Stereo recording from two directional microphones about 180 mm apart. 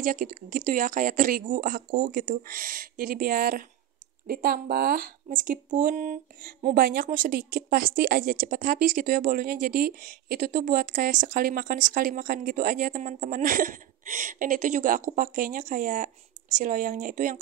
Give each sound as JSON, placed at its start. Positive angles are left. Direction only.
{"t": 0.0, "sound": "speech", "side_deg": -45}